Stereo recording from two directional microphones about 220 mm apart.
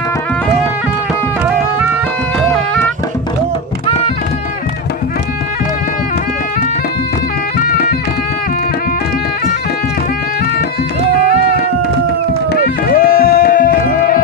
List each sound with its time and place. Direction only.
7.5 s music: 40° left (ahead or behind)
12.8 s music: 40° left (ahead or behind)